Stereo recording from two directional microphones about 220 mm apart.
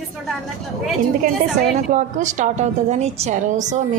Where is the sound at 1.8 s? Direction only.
35° right (ahead or behind).